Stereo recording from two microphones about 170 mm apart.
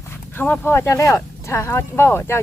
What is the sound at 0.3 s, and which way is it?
Speech, 10° left (ahead or behind).